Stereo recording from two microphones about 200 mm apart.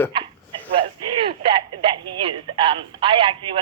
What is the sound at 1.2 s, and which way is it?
Speech, 25° right (ahead or behind).